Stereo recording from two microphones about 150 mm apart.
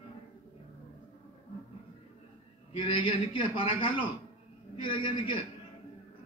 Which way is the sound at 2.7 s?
35° left (ahead or behind).